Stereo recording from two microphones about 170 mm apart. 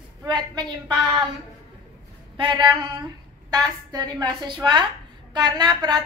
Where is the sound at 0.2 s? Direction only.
25° right (ahead or behind).